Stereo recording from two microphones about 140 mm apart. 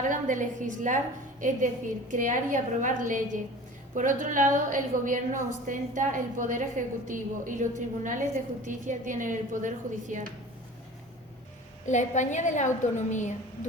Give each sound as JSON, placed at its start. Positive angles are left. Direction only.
{"t": 0.1, "sound": "a woman's voice", "side_deg": -65}
{"t": 11.9, "sound": "a woman's voice", "side_deg": 60}